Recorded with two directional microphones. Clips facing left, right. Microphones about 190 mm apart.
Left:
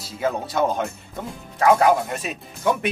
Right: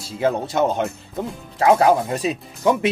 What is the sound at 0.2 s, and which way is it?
Speech, 25° right (ahead or behind).